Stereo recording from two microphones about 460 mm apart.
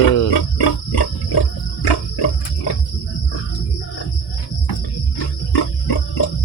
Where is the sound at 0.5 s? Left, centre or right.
Left.